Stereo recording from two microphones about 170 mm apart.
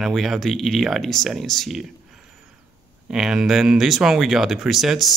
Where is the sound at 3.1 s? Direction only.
Centre (ahead or behind).